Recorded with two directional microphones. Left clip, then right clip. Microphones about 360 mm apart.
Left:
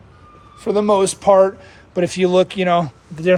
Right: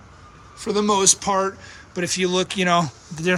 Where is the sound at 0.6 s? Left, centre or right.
Centre.